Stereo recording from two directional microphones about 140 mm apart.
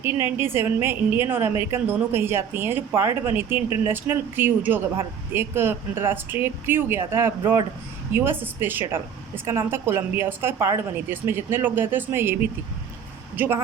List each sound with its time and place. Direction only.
0.0 s a woman's voice: 15° right (ahead or behind)